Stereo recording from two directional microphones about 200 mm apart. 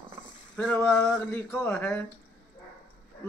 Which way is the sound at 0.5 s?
5° left (ahead or behind).